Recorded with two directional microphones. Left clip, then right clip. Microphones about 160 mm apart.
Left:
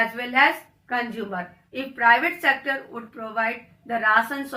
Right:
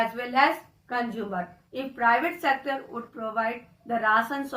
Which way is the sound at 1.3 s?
20° left (ahead or behind).